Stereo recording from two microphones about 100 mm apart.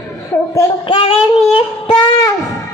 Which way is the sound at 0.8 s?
70° left (ahead or behind).